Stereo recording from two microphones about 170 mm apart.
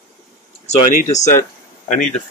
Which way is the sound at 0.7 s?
45° left (ahead or behind).